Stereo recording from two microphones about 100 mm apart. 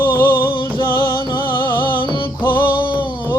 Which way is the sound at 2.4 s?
20° left (ahead or behind).